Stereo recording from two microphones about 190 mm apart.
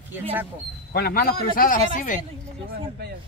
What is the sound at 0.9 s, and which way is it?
Speech, 55° left (ahead or behind).